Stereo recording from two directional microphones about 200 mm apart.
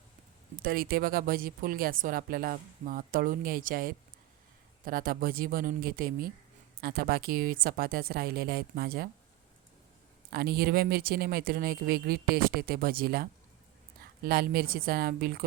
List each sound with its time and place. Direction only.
0.5 s a woman's voice: 45° right (ahead or behind)
10.2 s a woman's voice: 50° right (ahead or behind)